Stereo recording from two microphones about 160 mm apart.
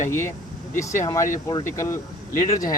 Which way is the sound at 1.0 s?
20° left (ahead or behind).